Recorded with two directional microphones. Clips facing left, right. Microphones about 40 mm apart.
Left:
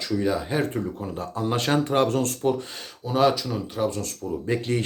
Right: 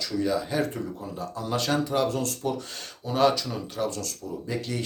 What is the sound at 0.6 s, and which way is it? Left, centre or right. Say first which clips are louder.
Speech: left 2 dB; left.